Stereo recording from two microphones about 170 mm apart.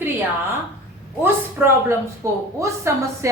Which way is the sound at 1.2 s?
10° right (ahead or behind).